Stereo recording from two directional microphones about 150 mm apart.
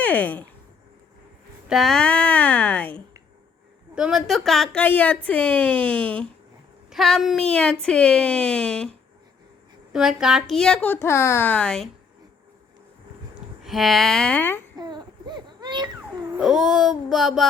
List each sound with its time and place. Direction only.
0.0 s speech: 10° left (ahead or behind)
1.6 s a woman's voice: centre (ahead or behind)
3.9 s a woman's voice: 5° right (ahead or behind)
6.9 s a woman's voice: centre (ahead or behind)
9.9 s speech: 5° right (ahead or behind)
13.7 s speech: centre (ahead or behind)
14.8 s baby cry: 30° right (ahead or behind)
16.4 s speech: 5° right (ahead or behind)